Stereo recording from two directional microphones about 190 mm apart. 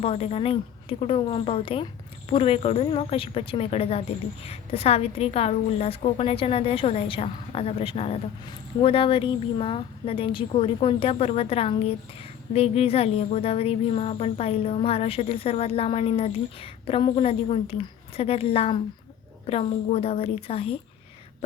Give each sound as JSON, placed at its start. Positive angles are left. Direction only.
{"t": 0.0, "sound": "speech", "side_deg": 30}